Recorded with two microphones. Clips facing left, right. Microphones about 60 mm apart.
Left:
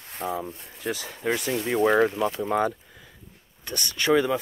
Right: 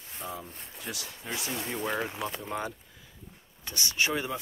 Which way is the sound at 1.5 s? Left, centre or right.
Left.